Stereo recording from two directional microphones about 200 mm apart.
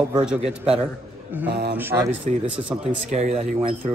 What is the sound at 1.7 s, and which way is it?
Speech, 10° right (ahead or behind).